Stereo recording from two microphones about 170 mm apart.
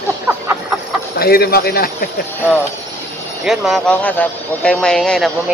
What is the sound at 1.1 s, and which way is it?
Speech, 65° left (ahead or behind).